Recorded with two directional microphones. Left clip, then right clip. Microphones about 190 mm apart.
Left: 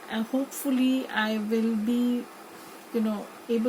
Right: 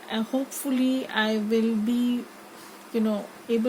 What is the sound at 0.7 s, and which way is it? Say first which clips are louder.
Speech: right 1 dB; 55° right (ahead or behind).